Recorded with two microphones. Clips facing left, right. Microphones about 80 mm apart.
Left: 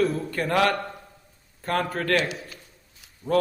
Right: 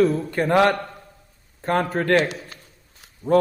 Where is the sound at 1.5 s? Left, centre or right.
Right.